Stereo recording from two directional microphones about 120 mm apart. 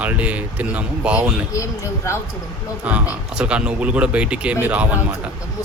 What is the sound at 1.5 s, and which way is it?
Speech, 25° left (ahead or behind).